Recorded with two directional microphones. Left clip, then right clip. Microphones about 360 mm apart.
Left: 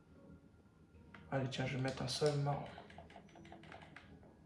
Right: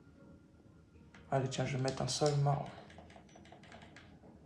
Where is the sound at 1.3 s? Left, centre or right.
Centre.